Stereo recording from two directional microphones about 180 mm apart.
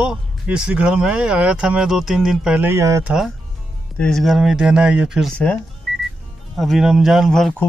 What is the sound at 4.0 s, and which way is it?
Speech, centre (ahead or behind).